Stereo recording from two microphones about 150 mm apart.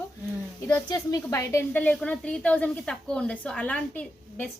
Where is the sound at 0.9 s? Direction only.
20° left (ahead or behind).